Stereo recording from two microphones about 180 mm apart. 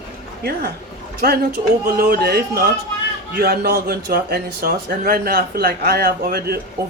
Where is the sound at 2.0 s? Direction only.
60° right (ahead or behind).